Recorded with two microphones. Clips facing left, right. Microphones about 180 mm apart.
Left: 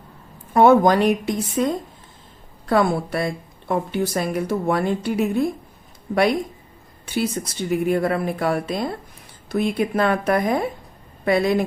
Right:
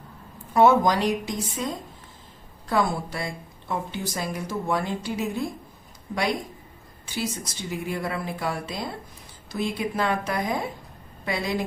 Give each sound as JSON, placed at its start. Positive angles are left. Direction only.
{"t": 0.5, "sound": "a woman's voice", "side_deg": 55}
{"t": 7.1, "sound": "a woman's voice", "side_deg": 60}